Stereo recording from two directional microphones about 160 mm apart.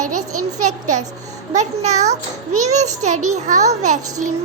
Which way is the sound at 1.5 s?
45° right (ahead or behind).